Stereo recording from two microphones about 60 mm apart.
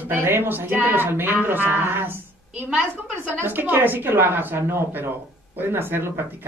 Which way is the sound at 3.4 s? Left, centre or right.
Right.